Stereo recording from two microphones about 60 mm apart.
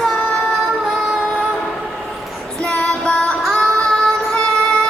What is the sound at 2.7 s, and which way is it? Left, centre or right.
Female singing, centre.